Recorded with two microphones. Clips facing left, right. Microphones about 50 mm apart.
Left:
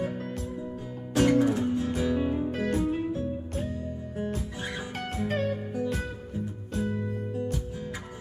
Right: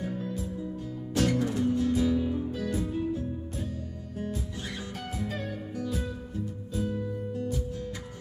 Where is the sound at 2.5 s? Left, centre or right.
Left.